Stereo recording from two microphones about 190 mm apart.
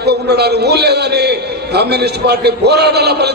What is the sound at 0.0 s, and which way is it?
A man's voice, 60° right (ahead or behind).